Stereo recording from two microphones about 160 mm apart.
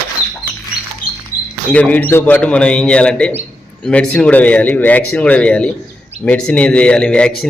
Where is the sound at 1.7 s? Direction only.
10° left (ahead or behind).